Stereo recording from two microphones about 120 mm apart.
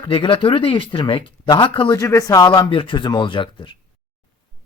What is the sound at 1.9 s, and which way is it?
A man's voice, 25° left (ahead or behind).